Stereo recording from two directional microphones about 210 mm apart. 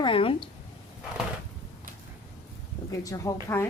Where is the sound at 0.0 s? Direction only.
25° left (ahead or behind).